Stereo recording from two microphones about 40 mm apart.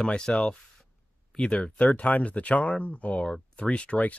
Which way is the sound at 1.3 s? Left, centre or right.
Left.